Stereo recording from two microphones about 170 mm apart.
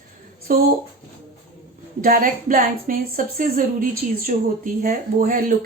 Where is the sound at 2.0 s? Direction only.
55° right (ahead or behind).